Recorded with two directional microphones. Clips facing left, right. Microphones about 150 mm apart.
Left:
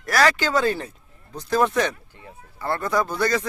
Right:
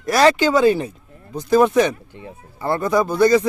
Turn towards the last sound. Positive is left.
turn(degrees=-15)  # may be behind; listen again after turning